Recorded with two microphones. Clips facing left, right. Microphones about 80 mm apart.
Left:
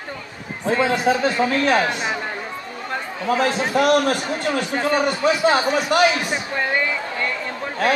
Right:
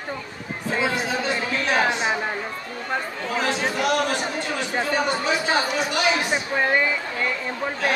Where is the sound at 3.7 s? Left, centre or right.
Left.